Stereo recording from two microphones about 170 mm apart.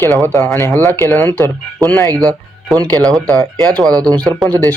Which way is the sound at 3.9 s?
20° right (ahead or behind).